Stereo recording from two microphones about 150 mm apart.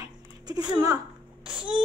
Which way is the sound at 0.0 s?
25° right (ahead or behind).